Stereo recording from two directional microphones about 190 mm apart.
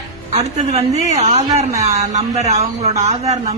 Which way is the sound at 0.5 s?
35° right (ahead or behind).